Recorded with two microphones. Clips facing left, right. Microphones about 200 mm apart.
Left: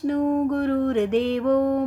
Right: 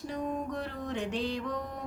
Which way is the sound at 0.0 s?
60° left (ahead or behind).